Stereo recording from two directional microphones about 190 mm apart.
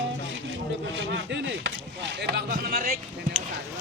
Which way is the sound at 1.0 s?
70° right (ahead or behind).